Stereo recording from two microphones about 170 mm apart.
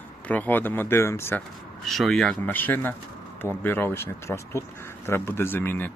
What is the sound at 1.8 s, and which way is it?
Speech, centre (ahead or behind).